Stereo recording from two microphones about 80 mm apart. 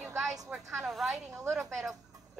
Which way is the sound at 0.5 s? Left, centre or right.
Centre.